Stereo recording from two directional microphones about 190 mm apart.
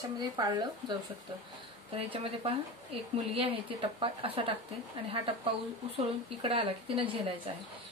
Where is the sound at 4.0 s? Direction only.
30° right (ahead or behind).